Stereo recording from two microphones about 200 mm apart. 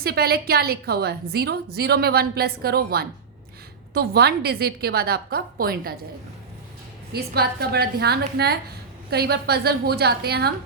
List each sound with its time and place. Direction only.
0.0 s a woman's voice: 50° right (ahead or behind)
7.1 s a woman's voice: 50° right (ahead or behind)